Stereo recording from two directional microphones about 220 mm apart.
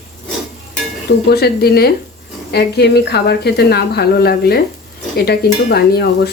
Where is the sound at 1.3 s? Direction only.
45° left (ahead or behind).